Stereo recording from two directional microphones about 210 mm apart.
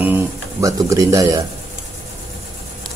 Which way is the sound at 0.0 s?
10° right (ahead or behind).